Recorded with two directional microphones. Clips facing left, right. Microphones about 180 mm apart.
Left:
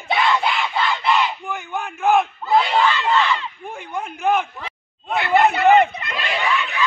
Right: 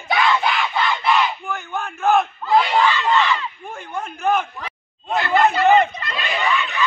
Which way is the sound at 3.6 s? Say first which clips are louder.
Left 1 dB; 15° left (ahead or behind).